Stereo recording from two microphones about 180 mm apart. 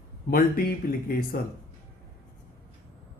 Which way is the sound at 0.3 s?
55° left (ahead or behind).